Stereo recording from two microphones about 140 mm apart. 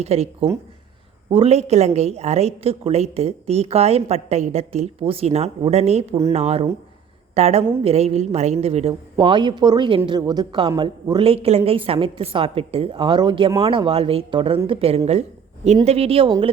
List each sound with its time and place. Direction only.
0.0 s a woman's voice: 50° right (ahead or behind)
9.1 s a woman's voice: 35° right (ahead or behind)
11.2 s a woman's voice: 45° right (ahead or behind)